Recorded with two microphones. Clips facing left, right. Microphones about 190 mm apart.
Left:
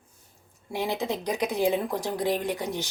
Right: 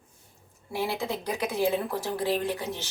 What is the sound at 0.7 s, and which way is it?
Speech, 20° left (ahead or behind).